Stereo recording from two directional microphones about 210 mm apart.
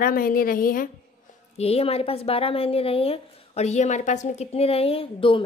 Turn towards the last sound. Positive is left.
turn(degrees=25)  # may be behind; listen again after turning